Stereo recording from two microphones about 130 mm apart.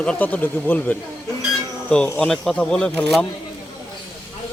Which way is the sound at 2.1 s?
5° left (ahead or behind).